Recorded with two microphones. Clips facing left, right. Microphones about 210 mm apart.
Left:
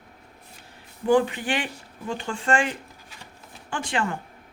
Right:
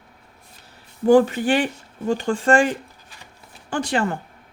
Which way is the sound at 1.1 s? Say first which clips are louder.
Right 6 dB; 40° right (ahead or behind).